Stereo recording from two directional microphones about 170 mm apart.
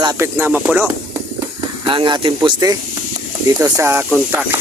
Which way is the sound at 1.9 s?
30° right (ahead or behind).